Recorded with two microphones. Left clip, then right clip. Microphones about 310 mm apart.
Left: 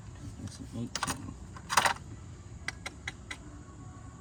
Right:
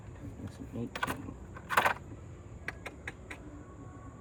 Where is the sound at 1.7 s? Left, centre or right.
Left.